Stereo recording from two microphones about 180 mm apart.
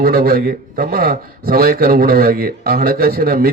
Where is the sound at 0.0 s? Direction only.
55° right (ahead or behind).